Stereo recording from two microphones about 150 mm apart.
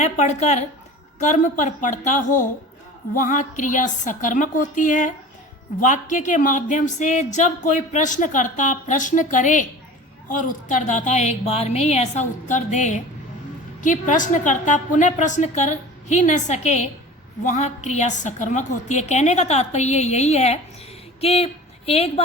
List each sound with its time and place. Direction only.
0.0 s a woman's voice: 50° left (ahead or behind)